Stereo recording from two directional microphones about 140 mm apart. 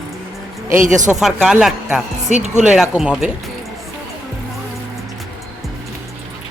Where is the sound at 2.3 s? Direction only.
55° right (ahead or behind).